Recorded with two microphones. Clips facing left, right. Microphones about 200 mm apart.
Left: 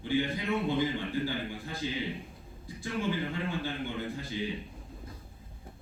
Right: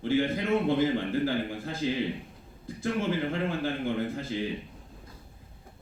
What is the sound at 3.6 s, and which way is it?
Speech, 50° right (ahead or behind).